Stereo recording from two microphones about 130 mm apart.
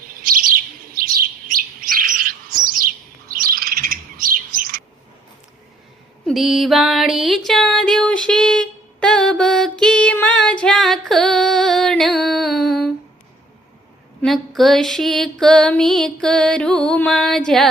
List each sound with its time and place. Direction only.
0.1 s bird: 90° right
6.2 s music: centre (ahead or behind)
14.2 s music: centre (ahead or behind)